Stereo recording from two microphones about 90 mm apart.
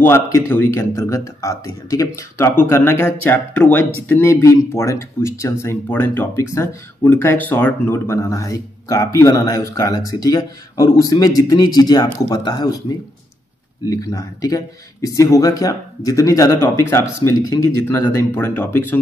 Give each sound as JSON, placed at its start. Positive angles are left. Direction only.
{"t": 0.0, "sound": "speech", "side_deg": 25}
{"t": 4.3, "sound": "speech", "side_deg": 30}
{"t": 13.8, "sound": "speech", "side_deg": 40}
{"t": 16.6, "sound": "speech", "side_deg": 30}